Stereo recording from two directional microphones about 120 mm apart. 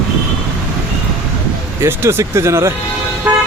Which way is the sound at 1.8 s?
20° right (ahead or behind).